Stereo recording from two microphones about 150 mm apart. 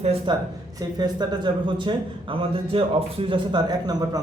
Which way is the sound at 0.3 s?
30° right (ahead or behind).